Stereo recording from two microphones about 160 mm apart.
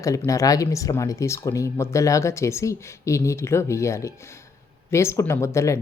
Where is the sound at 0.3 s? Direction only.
20° left (ahead or behind).